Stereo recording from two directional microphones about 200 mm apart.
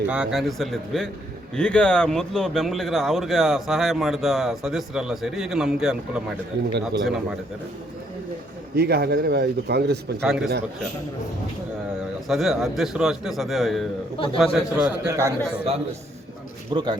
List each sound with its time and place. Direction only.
0.1 s speech: 5° right (ahead or behind)
8.7 s speech: 55° right (ahead or behind)
10.2 s speech: centre (ahead or behind)
12.3 s a man's voice: centre (ahead or behind)
16.7 s a man's voice: 20° right (ahead or behind)